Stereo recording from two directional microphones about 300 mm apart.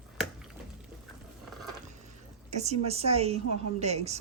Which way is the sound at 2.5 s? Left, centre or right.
Right.